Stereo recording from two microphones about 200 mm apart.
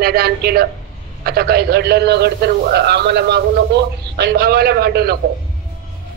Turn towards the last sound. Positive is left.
turn(degrees=-50)  # may be behind; listen again after turning